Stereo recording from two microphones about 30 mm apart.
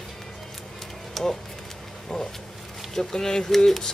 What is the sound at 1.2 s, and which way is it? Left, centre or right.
Speech, centre.